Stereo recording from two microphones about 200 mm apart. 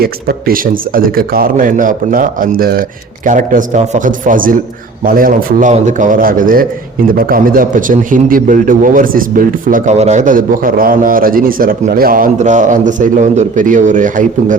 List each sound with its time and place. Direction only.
0.0 s a man's voice: 50° right (ahead or behind)